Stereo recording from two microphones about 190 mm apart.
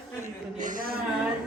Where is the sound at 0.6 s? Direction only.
50° right (ahead or behind).